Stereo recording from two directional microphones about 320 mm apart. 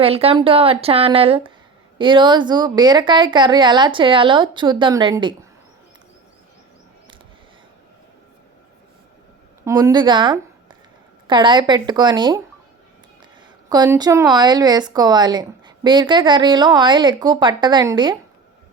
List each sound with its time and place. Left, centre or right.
0.0 s speech: centre
9.6 s a woman's voice: centre
13.7 s speech: centre